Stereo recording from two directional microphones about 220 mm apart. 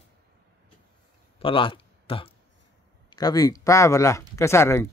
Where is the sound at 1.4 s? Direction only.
25° left (ahead or behind).